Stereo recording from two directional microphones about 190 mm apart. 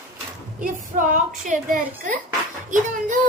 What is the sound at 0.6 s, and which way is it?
A woman's voice, 40° right (ahead or behind).